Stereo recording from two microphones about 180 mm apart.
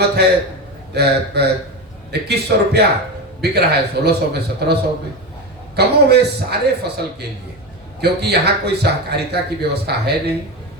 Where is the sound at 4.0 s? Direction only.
65° right (ahead or behind).